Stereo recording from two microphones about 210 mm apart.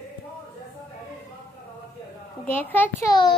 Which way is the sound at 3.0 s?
20° left (ahead or behind).